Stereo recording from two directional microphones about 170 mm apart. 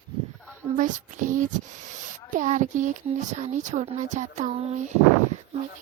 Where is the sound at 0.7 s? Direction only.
50° right (ahead or behind).